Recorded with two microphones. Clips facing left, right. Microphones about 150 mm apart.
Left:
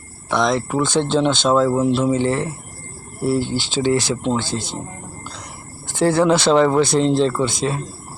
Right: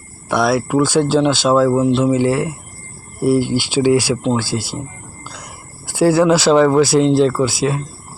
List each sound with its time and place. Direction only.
0.3 s speech: 10° right (ahead or behind)
5.9 s speech: 10° right (ahead or behind)